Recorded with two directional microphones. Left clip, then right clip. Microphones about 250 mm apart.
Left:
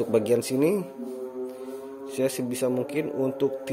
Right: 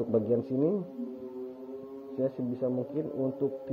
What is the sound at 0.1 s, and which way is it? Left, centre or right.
Speech, left.